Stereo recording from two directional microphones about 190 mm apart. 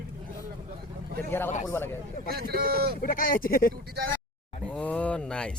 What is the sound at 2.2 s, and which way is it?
Speech, 55° right (ahead or behind).